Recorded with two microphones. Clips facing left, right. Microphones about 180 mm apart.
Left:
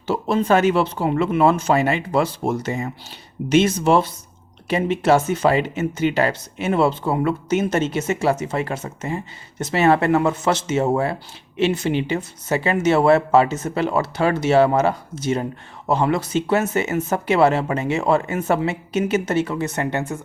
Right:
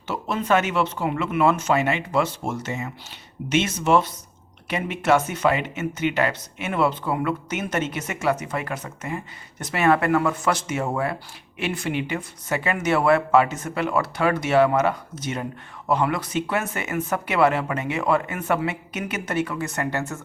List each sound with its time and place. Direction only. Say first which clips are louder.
0.1 s speech: left 4 dB; 30° left (ahead or behind)